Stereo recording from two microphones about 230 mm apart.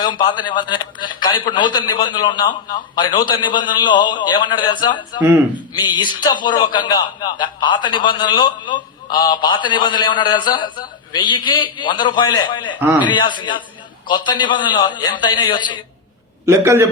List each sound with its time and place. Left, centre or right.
0.0 s a man's voice: centre
16.5 s a man's voice: centre